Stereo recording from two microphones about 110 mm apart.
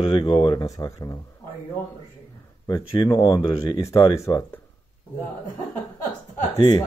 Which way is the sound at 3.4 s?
55° left (ahead or behind).